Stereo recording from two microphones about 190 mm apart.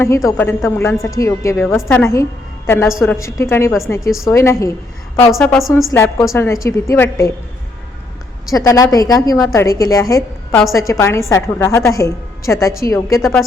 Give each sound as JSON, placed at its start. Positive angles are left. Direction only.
{"t": 0.0, "sound": "a woman's voice", "side_deg": 15}
{"t": 5.9, "sound": "a woman's voice", "side_deg": 15}
{"t": 8.4, "sound": "a woman's voice", "side_deg": 20}